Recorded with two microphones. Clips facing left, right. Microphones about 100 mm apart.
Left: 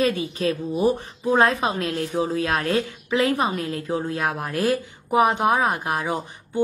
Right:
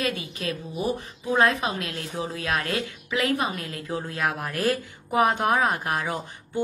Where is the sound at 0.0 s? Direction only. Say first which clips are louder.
Left 7 dB; 30° left (ahead or behind).